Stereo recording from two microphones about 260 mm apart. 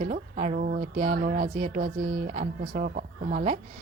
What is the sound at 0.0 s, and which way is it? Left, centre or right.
Speech, right.